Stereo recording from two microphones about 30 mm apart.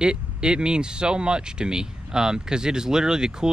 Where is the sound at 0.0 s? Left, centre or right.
Right.